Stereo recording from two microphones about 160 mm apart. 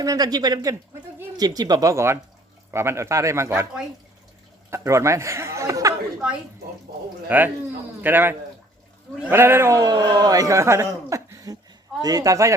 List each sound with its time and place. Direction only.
0.0 s speech: 25° right (ahead or behind)
4.7 s speech: 20° right (ahead or behind)
7.3 s speech: 10° right (ahead or behind)